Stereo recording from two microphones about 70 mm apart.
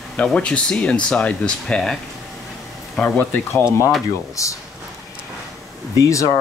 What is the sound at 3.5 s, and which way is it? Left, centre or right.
Speech, left.